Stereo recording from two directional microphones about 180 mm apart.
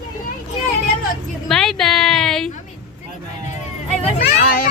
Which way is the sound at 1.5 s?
5° left (ahead or behind).